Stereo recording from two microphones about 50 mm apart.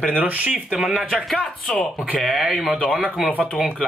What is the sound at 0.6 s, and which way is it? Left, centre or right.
Speech, centre.